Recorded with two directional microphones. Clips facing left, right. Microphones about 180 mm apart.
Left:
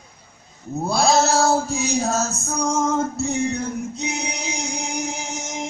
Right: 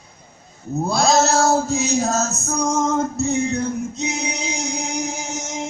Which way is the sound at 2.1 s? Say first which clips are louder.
Right 1 dB; 10° left (ahead or behind).